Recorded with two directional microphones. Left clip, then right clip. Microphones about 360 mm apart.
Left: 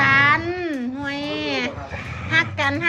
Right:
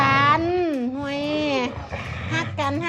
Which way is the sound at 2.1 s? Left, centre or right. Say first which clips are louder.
Left 8 dB; centre.